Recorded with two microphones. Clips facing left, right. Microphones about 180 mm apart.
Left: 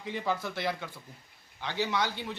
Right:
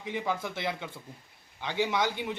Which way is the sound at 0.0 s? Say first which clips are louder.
Even; 15° right (ahead or behind).